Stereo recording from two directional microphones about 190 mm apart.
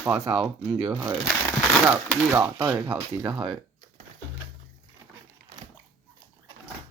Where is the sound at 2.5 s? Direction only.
20° right (ahead or behind).